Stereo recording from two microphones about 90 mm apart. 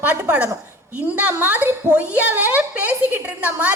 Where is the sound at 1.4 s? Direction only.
20° right (ahead or behind).